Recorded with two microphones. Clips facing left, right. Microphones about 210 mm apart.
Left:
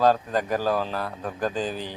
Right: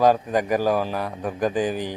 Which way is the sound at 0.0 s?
15° right (ahead or behind).